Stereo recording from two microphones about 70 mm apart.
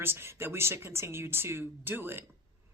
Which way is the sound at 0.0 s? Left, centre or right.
Right.